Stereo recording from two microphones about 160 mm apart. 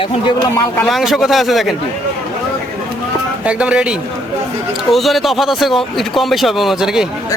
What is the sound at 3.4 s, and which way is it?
Speech, 5° right (ahead or behind).